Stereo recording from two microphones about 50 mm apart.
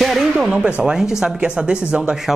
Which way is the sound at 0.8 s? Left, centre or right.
Centre.